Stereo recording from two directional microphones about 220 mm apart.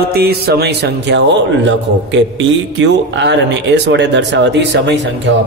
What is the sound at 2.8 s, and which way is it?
A man's voice, 55° right (ahead or behind).